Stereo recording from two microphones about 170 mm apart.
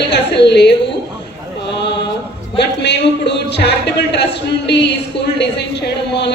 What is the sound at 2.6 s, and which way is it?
A woman's voice, 90° left.